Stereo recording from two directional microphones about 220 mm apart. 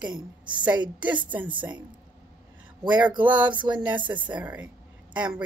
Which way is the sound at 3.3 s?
5° right (ahead or behind).